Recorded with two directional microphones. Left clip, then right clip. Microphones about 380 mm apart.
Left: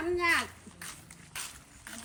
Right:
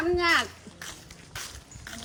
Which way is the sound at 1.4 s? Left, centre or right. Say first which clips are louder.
Right 3 dB; centre.